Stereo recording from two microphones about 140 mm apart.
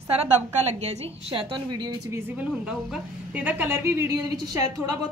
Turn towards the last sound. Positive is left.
turn(degrees=-25)  # may be behind; listen again after turning